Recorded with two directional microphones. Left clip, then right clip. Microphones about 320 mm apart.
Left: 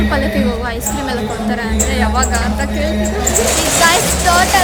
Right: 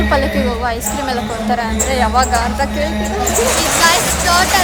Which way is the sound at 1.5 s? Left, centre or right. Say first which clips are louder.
Right 4 dB; centre.